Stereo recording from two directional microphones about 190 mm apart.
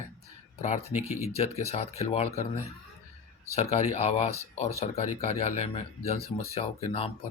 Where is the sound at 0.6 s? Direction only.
35° left (ahead or behind).